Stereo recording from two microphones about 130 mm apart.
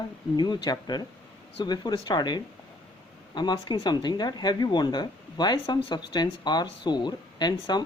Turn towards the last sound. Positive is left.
turn(degrees=35)  # may be behind; listen again after turning